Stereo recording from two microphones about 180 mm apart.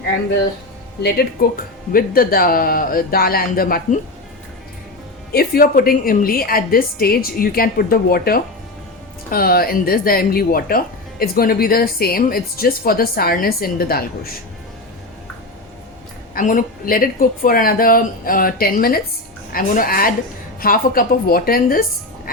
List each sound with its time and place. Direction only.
1.4 s speech: 55° left (ahead or behind)
5.3 s speech: 55° left (ahead or behind)
16.3 s a woman's voice: 50° left (ahead or behind)